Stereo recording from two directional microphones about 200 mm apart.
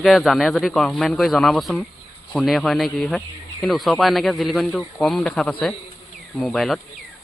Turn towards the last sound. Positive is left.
turn(degrees=0)  # may be behind; listen again after turning